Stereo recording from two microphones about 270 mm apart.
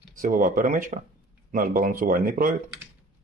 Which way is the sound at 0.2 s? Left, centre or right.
Right.